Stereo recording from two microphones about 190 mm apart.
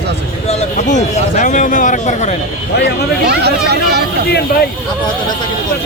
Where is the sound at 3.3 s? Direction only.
60° right (ahead or behind).